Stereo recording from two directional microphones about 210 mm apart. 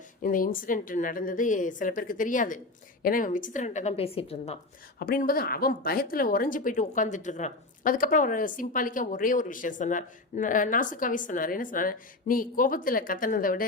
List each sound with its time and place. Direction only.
0.2 s a woman's voice: 40° left (ahead or behind)
4.9 s a woman's voice: 45° left (ahead or behind)